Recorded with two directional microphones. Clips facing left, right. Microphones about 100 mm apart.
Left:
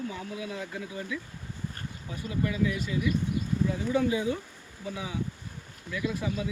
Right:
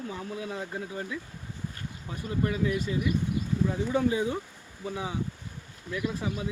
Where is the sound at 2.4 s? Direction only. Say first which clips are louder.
Right 1 dB; 35° right (ahead or behind).